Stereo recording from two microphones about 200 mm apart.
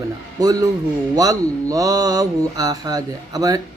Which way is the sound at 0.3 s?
20° right (ahead or behind).